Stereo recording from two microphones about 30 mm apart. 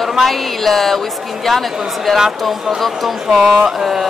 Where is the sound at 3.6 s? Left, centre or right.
Centre.